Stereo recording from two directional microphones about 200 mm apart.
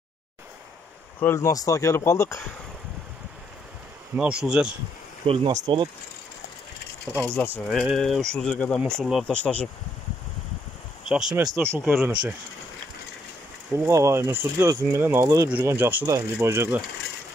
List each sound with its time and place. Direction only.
1.2 s speech: 15° left (ahead or behind)
4.2 s speech: 5° right (ahead or behind)
5.2 s speech: 30° right (ahead or behind)
7.2 s speech: 5° left (ahead or behind)
7.4 s speech: 5° right (ahead or behind)
11.1 s speech: 5° right (ahead or behind)
13.8 s speech: 15° right (ahead or behind)